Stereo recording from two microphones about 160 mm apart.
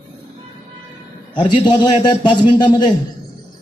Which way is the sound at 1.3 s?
30° left (ahead or behind).